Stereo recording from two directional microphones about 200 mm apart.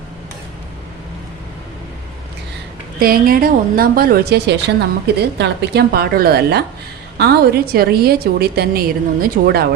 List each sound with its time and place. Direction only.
3.0 s a woman's voice: 45° right (ahead or behind)